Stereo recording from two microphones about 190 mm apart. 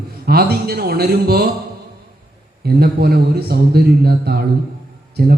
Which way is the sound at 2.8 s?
55° right (ahead or behind).